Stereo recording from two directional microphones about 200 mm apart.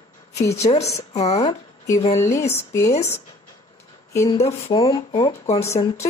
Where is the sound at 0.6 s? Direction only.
30° left (ahead or behind).